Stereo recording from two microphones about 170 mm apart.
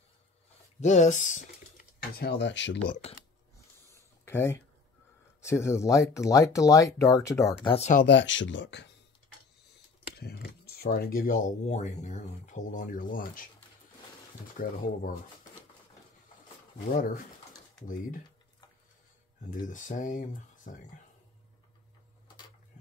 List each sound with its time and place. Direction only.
0.7 s speech: 45° left (ahead or behind); by 2.8 s 90° left
3.9 s a sound: 15° left (ahead or behind)
5.4 s speech: 15° left (ahead or behind)
7.6 s speech: 35° left (ahead or behind)
8.0 s speech: 90° left
10.1 s speech: 70° left (ahead or behind); by 13.5 s 55° left (ahead or behind)
14.6 s speech: 55° left (ahead or behind)
16.9 s speech: 55° left (ahead or behind)
19.5 s speech: 50° left (ahead or behind)